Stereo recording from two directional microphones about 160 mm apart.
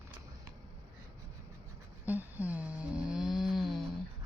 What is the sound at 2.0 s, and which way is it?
Snoring, 10° right (ahead or behind).